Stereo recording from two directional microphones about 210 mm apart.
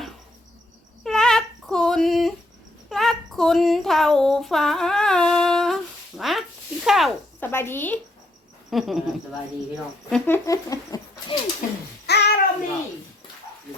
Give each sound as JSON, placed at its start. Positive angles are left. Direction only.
{"t": 1.0, "sound": "a sound", "side_deg": 5}
{"t": 6.8, "sound": "snake", "side_deg": 0}
{"t": 7.4, "sound": "speech", "side_deg": 10}
{"t": 8.7, "sound": "speech", "side_deg": 0}
{"t": 10.1, "sound": "speech", "side_deg": 10}
{"t": 11.6, "sound": "babbling", "side_deg": 40}
{"t": 12.0, "sound": "a sound", "side_deg": 50}